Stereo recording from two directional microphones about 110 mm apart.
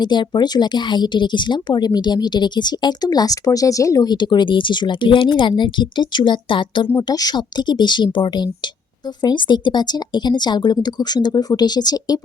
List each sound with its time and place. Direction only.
0.0 s speech: 40° left (ahead or behind)
7.1 s speech: 35° left (ahead or behind)